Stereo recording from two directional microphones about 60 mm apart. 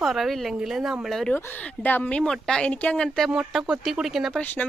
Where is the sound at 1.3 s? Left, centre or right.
Left.